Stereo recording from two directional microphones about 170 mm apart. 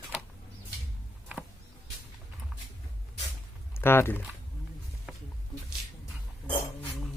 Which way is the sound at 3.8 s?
15° left (ahead or behind).